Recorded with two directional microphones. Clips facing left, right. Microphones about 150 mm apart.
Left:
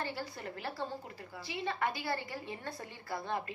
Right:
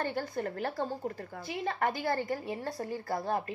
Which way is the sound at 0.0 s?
50° right (ahead or behind).